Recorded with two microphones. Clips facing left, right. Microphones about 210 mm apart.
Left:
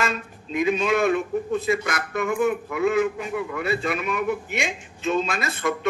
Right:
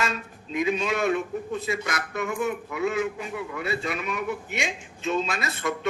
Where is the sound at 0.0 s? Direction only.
55° left (ahead or behind).